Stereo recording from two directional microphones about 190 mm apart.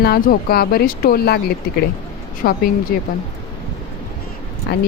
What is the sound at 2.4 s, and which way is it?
Speech, 50° left (ahead or behind).